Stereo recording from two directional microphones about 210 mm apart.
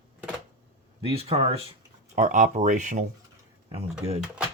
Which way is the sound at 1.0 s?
30° right (ahead or behind).